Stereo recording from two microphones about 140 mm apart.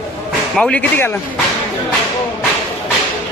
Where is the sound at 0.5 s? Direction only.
5° left (ahead or behind).